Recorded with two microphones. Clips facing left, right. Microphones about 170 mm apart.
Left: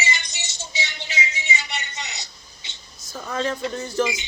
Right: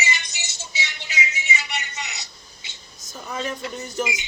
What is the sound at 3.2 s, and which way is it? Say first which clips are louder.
Speech: left 4 dB; 15° right (ahead or behind).